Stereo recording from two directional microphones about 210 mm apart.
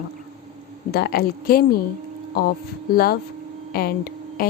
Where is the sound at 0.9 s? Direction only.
45° left (ahead or behind).